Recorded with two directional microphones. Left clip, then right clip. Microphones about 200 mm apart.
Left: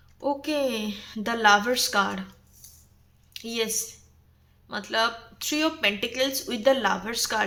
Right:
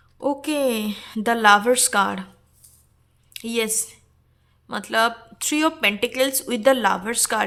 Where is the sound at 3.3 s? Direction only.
40° right (ahead or behind).